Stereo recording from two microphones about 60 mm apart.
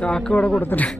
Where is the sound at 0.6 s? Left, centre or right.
Left.